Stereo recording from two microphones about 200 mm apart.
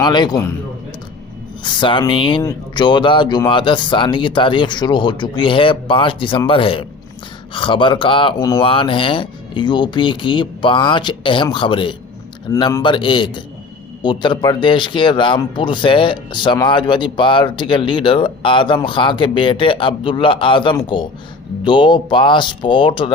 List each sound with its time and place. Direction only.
0.0 s a man's voice: 20° left (ahead or behind)
1.6 s a man's voice: 25° left (ahead or behind)